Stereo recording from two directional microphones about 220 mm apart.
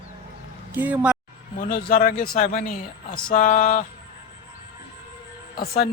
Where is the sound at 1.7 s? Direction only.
45° left (ahead or behind).